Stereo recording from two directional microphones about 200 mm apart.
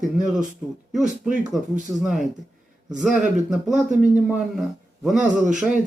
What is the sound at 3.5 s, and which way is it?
Speech, centre (ahead or behind).